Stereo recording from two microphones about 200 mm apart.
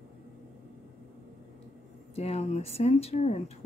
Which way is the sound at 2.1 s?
30° left (ahead or behind).